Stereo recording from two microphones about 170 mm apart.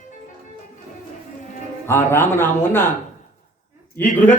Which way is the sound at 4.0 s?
10° left (ahead or behind).